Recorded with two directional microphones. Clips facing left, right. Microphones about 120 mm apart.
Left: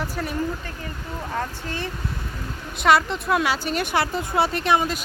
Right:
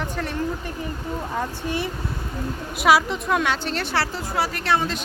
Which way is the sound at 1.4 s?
15° right (ahead or behind).